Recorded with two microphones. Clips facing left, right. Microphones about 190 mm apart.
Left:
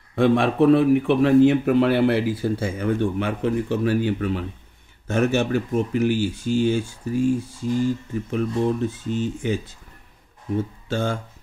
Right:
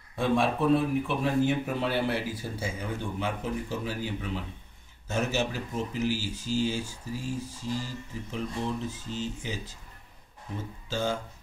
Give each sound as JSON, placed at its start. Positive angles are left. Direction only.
{"t": 0.1, "sound": "speech", "side_deg": 70}
{"t": 10.9, "sound": "speech", "side_deg": 55}